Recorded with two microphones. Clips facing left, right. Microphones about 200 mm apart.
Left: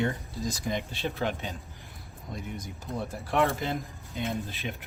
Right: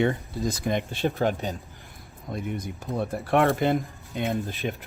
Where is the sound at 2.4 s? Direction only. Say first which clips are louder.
Right 8 dB; 55° right (ahead or behind).